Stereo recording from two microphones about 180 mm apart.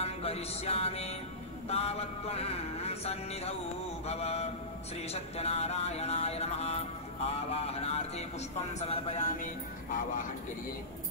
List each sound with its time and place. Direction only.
0.0 s music: 35° left (ahead or behind)
1.7 s mantra: 35° left (ahead or behind)